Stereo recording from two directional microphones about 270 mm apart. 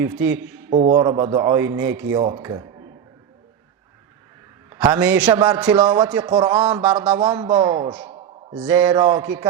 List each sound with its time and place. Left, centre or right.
0.0 s a man's voice: centre
0.7 s a man's voice: right
4.7 s a man's voice: centre
8.6 s a man's voice: centre